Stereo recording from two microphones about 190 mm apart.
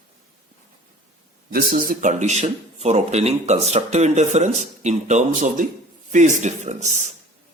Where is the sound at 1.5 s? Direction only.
45° right (ahead or behind).